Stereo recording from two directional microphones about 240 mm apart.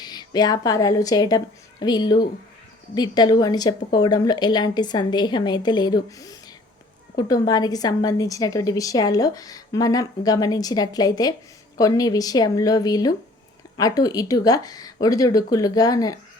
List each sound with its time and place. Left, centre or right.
0.0 s a woman's voice: centre